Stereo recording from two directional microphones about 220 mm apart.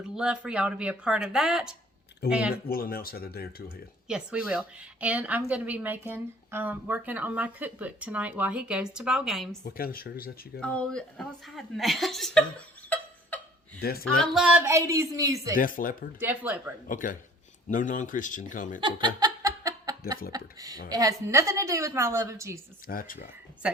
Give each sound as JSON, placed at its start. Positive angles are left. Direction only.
{"t": 0.2, "sound": "speech", "side_deg": -5}
{"t": 2.6, "sound": "speech", "side_deg": 45}
{"t": 4.1, "sound": "speech", "side_deg": -5}
{"t": 9.6, "sound": "speech", "side_deg": 40}
{"t": 10.6, "sound": "a woman's voice", "side_deg": 5}
{"t": 13.8, "sound": "speech", "side_deg": 45}
{"t": 14.2, "sound": "speech", "side_deg": -5}
{"t": 15.5, "sound": "a man's voice", "side_deg": 40}
{"t": 16.2, "sound": "speech", "side_deg": -5}
{"t": 16.9, "sound": "a man's voice", "side_deg": 35}
{"t": 18.8, "sound": "laughter", "side_deg": -20}
{"t": 20.3, "sound": "speech", "side_deg": -15}
{"t": 22.9, "sound": "a man's voice", "side_deg": 40}